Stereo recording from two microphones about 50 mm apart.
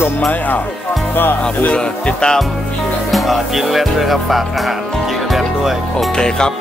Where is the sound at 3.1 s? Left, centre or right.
Centre.